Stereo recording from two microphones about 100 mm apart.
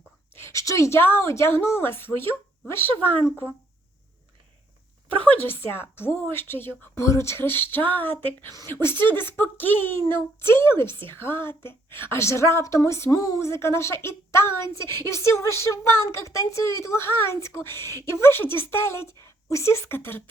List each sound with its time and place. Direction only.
0.3 s a woman's voice: 30° left (ahead or behind)
5.2 s a woman's voice: 20° left (ahead or behind)
9.3 s a woman's voice: 20° left (ahead or behind)